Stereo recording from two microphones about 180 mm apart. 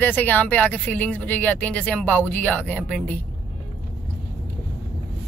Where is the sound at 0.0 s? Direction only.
10° left (ahead or behind).